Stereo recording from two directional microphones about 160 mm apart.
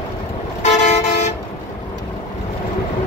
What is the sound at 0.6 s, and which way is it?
Vehicle, 45° left (ahead or behind).